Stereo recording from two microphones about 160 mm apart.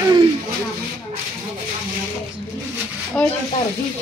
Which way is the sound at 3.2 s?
5° left (ahead or behind).